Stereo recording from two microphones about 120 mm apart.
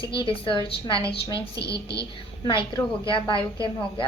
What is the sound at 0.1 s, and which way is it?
Speech, 45° left (ahead or behind).